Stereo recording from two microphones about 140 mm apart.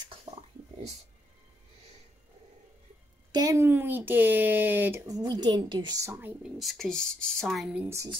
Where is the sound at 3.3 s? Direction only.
25° right (ahead or behind).